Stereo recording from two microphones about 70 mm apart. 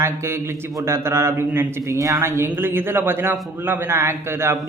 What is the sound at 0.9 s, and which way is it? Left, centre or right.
Speech, right.